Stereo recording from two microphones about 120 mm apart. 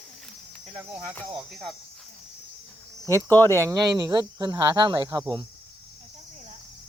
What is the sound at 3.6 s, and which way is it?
Speech, 30° right (ahead or behind).